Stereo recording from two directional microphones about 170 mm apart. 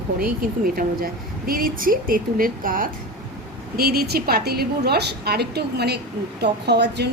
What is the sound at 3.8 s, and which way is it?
A woman's voice, 65° right (ahead or behind).